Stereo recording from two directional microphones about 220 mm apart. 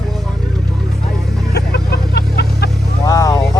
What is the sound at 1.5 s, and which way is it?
Music, 50° left (ahead or behind).